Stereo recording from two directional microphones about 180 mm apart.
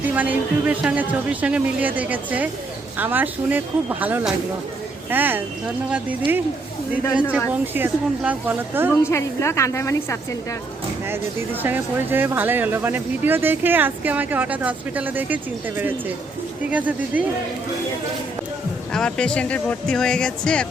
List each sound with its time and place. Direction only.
0.0 s speech: 10° right (ahead or behind)
7.7 s speech: 10° right (ahead or behind)
9.0 s a woman's voice: 15° left (ahead or behind)
11.1 s speech: 10° right (ahead or behind)
18.9 s speech: 5° left (ahead or behind)